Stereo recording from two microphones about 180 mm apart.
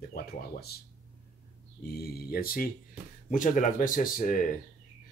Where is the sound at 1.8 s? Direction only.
60° left (ahead or behind).